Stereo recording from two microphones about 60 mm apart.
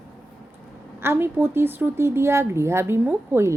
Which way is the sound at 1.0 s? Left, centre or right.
Right.